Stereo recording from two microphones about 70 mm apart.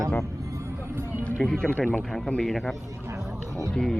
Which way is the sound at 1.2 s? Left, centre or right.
Centre.